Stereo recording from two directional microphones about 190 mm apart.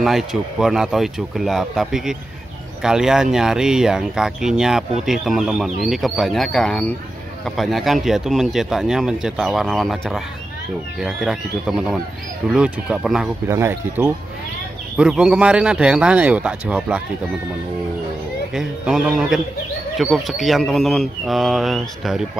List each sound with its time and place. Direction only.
0.0 s speech: centre (ahead or behind)
18.5 s speech: centre (ahead or behind)